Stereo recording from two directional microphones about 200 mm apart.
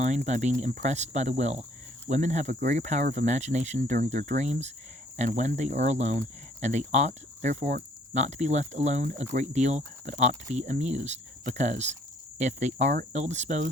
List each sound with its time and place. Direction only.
0.0 s speech: 35° right (ahead or behind)